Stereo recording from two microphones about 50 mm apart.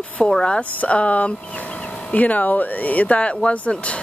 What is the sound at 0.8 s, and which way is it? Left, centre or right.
Speech, left.